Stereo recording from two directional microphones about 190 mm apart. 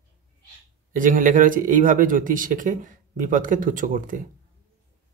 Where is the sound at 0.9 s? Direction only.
45° right (ahead or behind).